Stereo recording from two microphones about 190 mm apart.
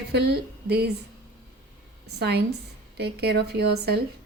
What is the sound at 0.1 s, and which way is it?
Speech, 60° right (ahead or behind).